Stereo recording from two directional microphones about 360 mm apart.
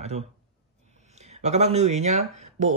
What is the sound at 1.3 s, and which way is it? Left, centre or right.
Speech, centre.